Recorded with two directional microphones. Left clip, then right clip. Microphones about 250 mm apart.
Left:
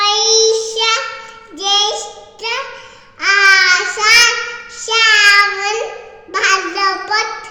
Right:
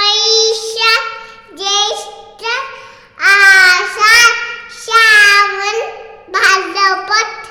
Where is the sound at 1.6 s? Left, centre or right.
Right.